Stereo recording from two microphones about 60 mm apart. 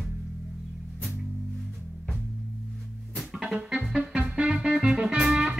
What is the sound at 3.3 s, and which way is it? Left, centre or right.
Music, centre.